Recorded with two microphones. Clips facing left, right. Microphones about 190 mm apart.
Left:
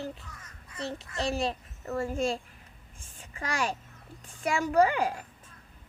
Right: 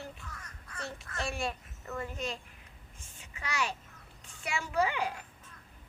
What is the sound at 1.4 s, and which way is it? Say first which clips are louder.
Speech: left 5 dB; 40° left (ahead or behind).